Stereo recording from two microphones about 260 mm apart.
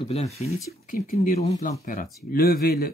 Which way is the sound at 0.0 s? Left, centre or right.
Left.